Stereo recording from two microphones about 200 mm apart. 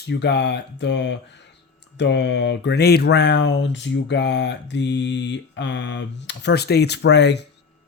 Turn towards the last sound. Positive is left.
turn(degrees=60)  # may be behind; listen again after turning